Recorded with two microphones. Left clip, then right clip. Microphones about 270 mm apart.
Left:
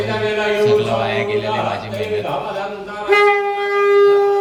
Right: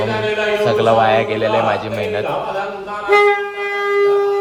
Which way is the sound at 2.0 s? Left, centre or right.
Centre.